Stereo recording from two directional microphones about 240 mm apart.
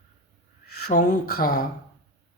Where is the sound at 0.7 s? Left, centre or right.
Left.